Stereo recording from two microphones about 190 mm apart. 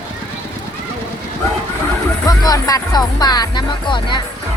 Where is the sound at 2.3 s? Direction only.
20° left (ahead or behind).